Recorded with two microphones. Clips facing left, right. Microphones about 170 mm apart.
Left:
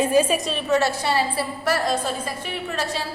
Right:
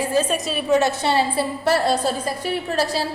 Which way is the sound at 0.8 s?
25° right (ahead or behind).